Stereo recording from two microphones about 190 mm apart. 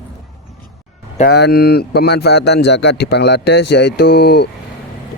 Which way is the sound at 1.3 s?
60° left (ahead or behind).